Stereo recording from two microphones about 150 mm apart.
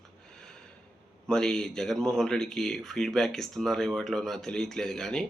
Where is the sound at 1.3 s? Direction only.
5° left (ahead or behind).